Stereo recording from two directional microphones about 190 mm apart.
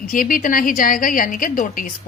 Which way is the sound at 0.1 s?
45° left (ahead or behind).